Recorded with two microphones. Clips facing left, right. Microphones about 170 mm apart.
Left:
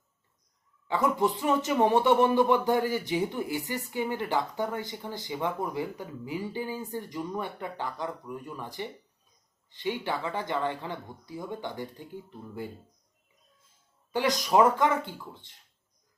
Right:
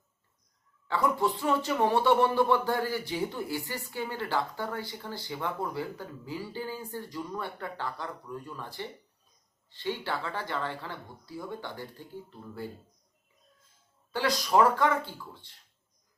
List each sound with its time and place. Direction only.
0.9 s speech: 20° left (ahead or behind)
14.1 s speech: 20° left (ahead or behind)